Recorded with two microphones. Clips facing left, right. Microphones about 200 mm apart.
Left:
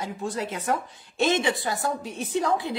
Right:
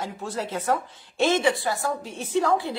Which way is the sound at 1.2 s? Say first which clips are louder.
Right 3 dB; 20° left (ahead or behind).